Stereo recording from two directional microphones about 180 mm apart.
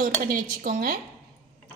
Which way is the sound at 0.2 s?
50° right (ahead or behind).